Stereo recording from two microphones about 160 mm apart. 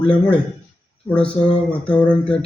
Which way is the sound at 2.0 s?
5° left (ahead or behind).